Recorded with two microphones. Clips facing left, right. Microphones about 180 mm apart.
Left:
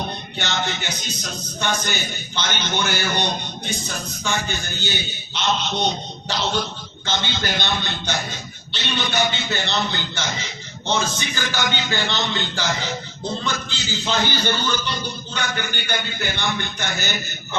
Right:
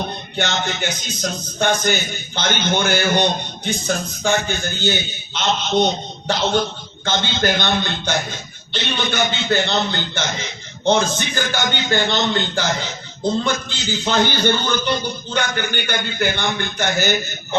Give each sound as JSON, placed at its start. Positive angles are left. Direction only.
{"t": 0.3, "sound": "a man's voice", "side_deg": -55}
{"t": 7.0, "sound": "a man's voice", "side_deg": -50}